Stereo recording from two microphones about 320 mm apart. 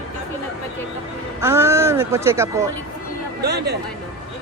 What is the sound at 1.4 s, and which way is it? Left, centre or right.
Speech, centre.